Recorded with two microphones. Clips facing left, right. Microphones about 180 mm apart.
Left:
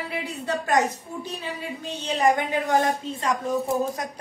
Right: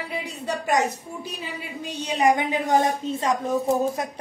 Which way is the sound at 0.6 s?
10° right (ahead or behind).